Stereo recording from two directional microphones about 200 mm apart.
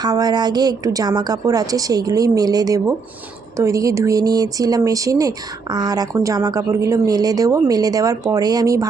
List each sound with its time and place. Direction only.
0.0 s a woman's voice: 20° right (ahead or behind)